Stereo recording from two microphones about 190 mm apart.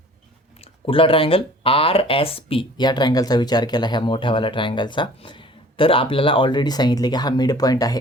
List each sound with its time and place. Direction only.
0.6 s speech: 30° left (ahead or behind)